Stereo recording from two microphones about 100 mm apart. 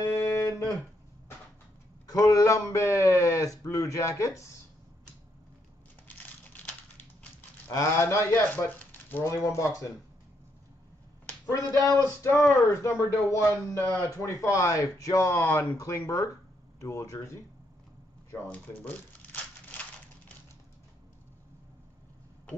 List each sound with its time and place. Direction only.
0.0 s a sound: 25° left (ahead or behind)
2.0 s a man's voice: 35° left (ahead or behind)
6.0 s a sound: 15° left (ahead or behind)
7.7 s speech: 30° left (ahead or behind)
9.2 s speech: 30° left (ahead or behind)
12.0 s speech: 25° left (ahead or behind)
18.5 s speech: 20° left (ahead or behind)